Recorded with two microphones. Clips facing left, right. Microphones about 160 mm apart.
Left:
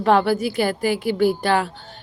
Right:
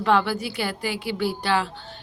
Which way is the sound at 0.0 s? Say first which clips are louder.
Left 4 dB; 45° left (ahead or behind).